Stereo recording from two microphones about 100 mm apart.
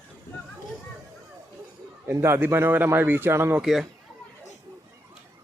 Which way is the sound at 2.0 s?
25° right (ahead or behind).